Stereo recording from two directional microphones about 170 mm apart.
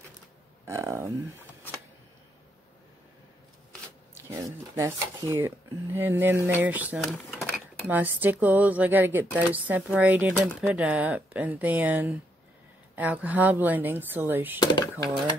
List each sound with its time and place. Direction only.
0.7 s speech: 15° right (ahead or behind)
4.1 s speech: 15° right (ahead or behind)
7.1 s a sound: centre (ahead or behind)
7.9 s speech: 10° right (ahead or behind)
14.6 s speech: 25° left (ahead or behind)